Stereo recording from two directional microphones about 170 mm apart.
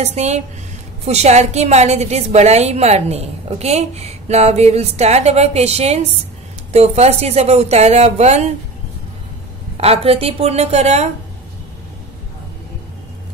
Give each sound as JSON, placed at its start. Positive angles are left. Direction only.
{"t": 0.0, "sound": "a woman's voice", "side_deg": -40}
{"t": 9.8, "sound": "a woman's voice", "side_deg": -35}